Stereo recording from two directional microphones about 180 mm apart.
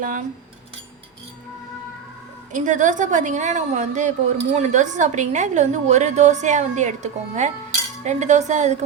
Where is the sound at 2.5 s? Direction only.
45° right (ahead or behind).